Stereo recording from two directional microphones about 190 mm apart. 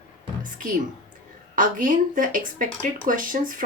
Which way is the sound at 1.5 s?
45° right (ahead or behind).